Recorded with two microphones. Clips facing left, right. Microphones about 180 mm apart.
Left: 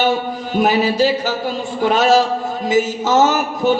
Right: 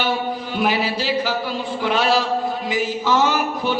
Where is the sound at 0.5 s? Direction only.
45° left (ahead or behind).